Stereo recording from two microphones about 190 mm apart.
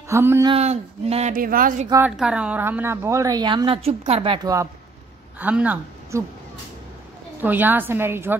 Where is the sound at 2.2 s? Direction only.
5° right (ahead or behind).